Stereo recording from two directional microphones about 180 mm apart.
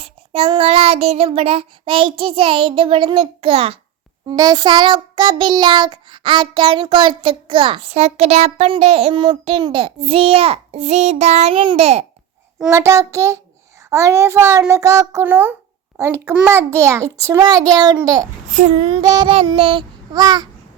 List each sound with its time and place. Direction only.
0.0 s child singing: 35° right (ahead or behind)
12.7 s a child's voice: 15° right (ahead or behind)
18.0 s child singing: 20° right (ahead or behind)
18.5 s child singing: 35° right (ahead or behind)